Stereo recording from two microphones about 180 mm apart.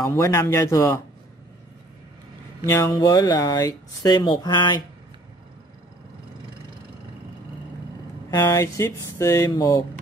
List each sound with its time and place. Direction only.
0.0 s speech: 15° left (ahead or behind)
2.6 s speech: 15° left (ahead or behind)
8.3 s speech: 20° left (ahead or behind)